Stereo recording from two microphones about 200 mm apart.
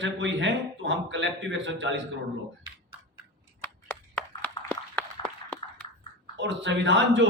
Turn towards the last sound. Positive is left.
turn(degrees=-65)  # may be behind; listen again after turning